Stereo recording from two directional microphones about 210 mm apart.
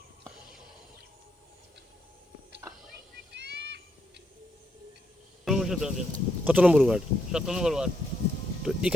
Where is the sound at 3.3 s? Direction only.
55° right (ahead or behind).